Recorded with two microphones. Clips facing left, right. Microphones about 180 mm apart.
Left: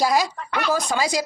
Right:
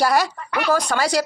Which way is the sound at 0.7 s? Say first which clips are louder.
Right 3 dB; 10° left (ahead or behind).